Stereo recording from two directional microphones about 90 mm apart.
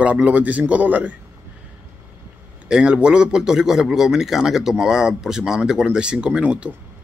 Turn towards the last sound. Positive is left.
turn(degrees=-10)  # may be behind; listen again after turning